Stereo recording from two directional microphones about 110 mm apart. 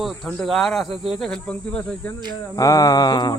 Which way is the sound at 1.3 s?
10° left (ahead or behind).